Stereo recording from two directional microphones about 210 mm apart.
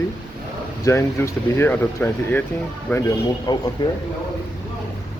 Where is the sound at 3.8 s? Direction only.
20° left (ahead or behind).